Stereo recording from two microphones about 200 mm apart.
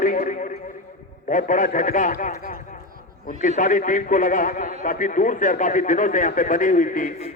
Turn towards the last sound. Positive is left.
turn(degrees=35)  # may be behind; listen again after turning